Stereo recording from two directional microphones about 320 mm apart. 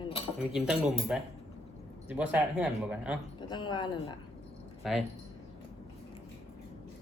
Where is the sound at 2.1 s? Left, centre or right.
Centre.